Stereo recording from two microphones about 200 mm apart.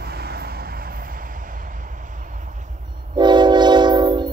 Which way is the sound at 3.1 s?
20° right (ahead or behind).